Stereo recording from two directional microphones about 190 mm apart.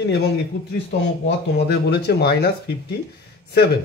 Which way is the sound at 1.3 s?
60° left (ahead or behind).